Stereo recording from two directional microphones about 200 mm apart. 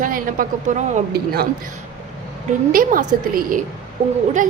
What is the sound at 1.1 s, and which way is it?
Speech, 50° right (ahead or behind).